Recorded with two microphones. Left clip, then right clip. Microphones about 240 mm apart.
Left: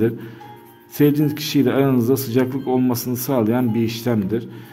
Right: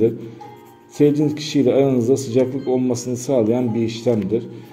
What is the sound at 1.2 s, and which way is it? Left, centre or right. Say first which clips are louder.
A man's voice: right 1 dB; left.